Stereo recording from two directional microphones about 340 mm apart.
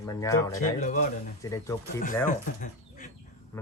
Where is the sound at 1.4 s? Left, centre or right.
Centre.